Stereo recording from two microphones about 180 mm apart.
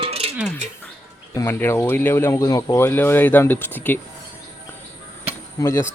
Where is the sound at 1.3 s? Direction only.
15° left (ahead or behind).